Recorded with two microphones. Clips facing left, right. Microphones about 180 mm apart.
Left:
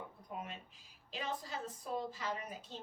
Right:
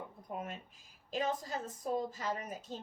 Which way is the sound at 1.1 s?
45° right (ahead or behind).